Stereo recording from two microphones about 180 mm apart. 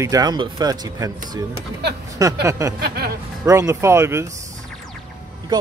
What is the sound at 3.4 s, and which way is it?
Speech, 15° right (ahead or behind).